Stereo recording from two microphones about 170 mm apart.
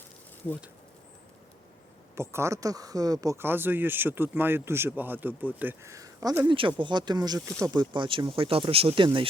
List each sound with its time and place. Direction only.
2.1 s speech: 15° right (ahead or behind); by 9.0 s 35° right (ahead or behind)